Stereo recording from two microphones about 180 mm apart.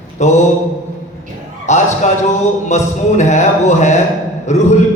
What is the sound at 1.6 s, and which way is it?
Speech, 40° left (ahead or behind).